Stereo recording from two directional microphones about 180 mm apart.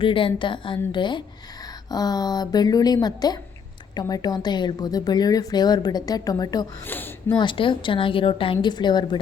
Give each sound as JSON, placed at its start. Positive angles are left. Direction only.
{"t": 0.0, "sound": "a woman's voice", "side_deg": 30}
{"t": 6.8, "sound": "speech", "side_deg": 10}
{"t": 7.3, "sound": "a woman's voice", "side_deg": 25}